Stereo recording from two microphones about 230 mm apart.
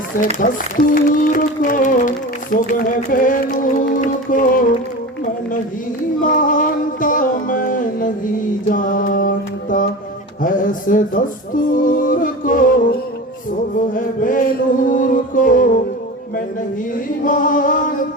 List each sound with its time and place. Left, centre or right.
0.3 s speech: left
6.2 s speech: left
8.7 s mantra: left
10.4 s speech: left
16.9 s speech: left